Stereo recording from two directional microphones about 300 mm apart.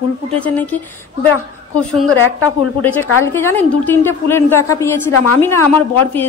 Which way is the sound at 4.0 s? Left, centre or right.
Centre.